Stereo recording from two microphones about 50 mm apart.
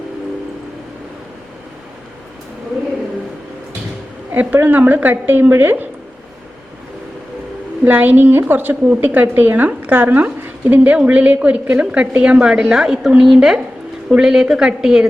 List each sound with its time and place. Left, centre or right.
4.3 s a woman's voice: right
7.9 s a woman's voice: right; by 15.0 s centre